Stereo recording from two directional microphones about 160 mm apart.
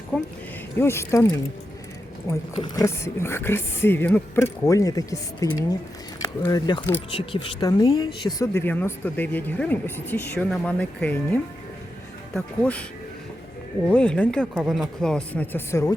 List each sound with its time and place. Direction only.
0.8 s speech: 15° left (ahead or behind)
2.6 s speech: 20° left (ahead or behind)
13.8 s speech: 10° left (ahead or behind)